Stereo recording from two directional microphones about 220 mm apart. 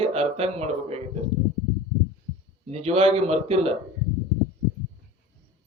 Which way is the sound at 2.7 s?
30° right (ahead or behind).